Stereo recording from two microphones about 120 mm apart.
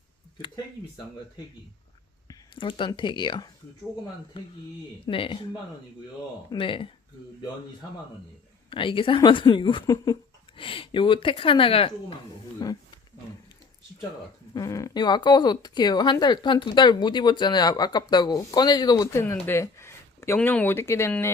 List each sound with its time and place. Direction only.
2.6 s speech: 45° left (ahead or behind)
6.5 s speech: 45° left (ahead or behind)
8.7 s speech: 45° left (ahead or behind)
9.8 s speech: 30° left (ahead or behind)
10.6 s speech: 45° left (ahead or behind)
12.6 s speech: 35° left (ahead or behind)
14.5 s speech: 30° left (ahead or behind)
19.1 s speech: 20° left (ahead or behind)